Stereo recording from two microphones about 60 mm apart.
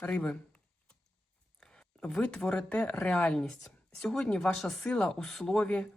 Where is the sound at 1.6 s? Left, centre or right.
Centre.